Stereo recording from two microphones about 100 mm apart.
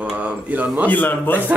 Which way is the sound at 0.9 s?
15° left (ahead or behind).